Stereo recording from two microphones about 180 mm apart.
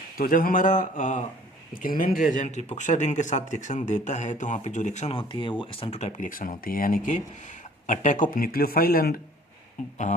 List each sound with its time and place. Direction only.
0.2 s speech: 50° left (ahead or behind)